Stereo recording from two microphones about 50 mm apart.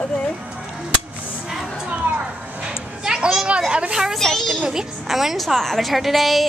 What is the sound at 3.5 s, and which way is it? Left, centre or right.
Speech, right.